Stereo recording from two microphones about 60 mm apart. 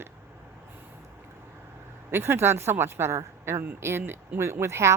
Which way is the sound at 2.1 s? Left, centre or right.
Right.